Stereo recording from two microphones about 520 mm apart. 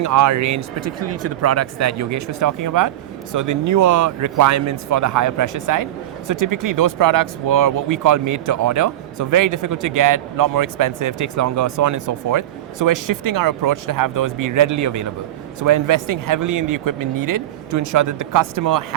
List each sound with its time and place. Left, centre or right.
0.0 s speech: right